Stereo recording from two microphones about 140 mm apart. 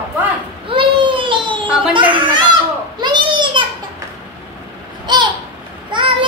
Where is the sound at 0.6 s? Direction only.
35° right (ahead or behind).